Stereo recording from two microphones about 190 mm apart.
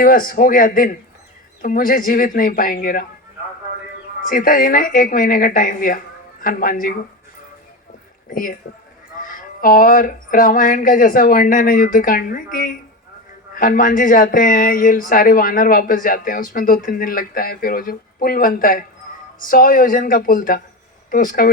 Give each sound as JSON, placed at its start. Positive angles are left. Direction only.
{"t": 0.0, "sound": "speech", "side_deg": 45}
{"t": 4.2, "sound": "speech", "side_deg": 45}
{"t": 8.3, "sound": "speech", "side_deg": 45}